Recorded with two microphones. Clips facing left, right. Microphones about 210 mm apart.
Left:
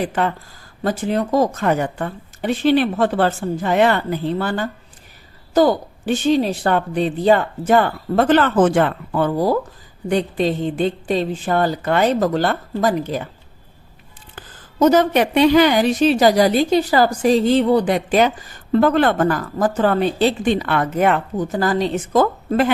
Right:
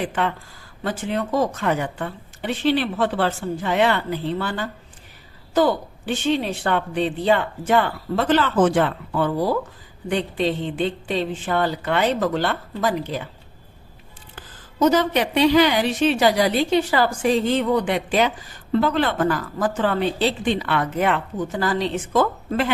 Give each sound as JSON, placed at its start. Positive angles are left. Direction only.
{"t": 0.0, "sound": "a woman's voice", "side_deg": 40}
{"t": 14.8, "sound": "a woman's voice", "side_deg": 50}